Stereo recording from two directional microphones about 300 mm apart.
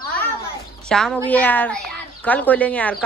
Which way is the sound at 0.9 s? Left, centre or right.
Centre.